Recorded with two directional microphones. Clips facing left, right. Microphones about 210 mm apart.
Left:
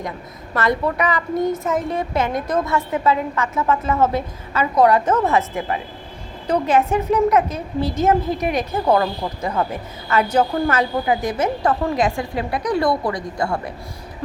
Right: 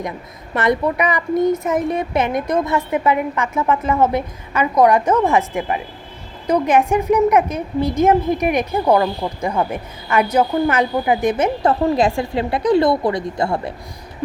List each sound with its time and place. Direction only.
0.5 s a woman's voice: 20° right (ahead or behind)